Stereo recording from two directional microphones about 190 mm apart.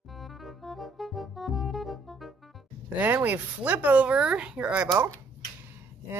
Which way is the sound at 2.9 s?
10° right (ahead or behind).